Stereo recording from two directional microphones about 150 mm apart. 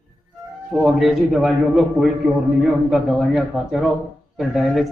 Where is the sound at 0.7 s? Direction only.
Centre (ahead or behind).